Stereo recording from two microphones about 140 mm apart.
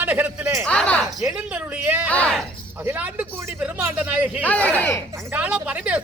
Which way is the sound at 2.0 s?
10° left (ahead or behind).